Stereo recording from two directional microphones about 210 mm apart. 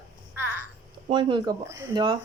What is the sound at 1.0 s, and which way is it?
A woman's voice, 20° right (ahead or behind).